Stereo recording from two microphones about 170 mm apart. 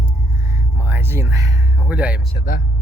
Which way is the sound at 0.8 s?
15° right (ahead or behind).